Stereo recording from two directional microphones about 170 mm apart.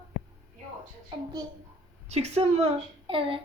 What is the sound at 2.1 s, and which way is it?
A woman's voice, 40° right (ahead or behind).